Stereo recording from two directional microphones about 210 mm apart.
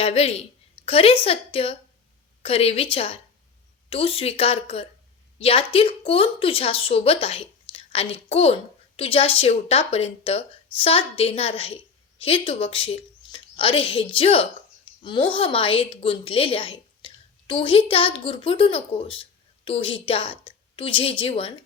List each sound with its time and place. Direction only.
0.0 s a woman's voice: 30° left (ahead or behind)